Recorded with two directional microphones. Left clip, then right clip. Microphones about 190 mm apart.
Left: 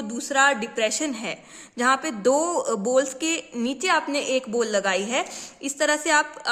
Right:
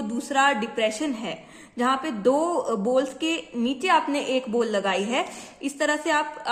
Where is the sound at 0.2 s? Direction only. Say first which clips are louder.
Left 1 dB; 25° left (ahead or behind).